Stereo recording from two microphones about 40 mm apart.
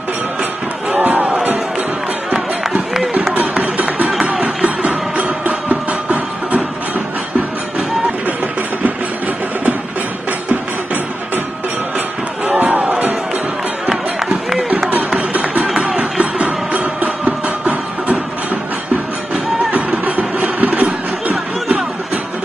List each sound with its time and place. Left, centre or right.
0.9 s crowd: right
3.6 s music: right
12.4 s crowd: right
14.2 s a sound: centre
15.1 s music: right
19.3 s music: right